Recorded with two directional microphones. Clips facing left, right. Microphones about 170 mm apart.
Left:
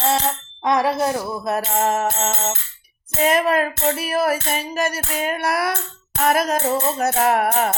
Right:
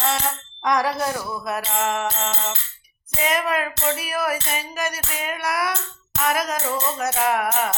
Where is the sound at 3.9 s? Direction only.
30° left (ahead or behind).